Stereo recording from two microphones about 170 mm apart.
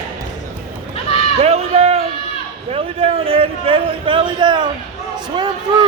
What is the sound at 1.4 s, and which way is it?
Run, 35° right (ahead or behind).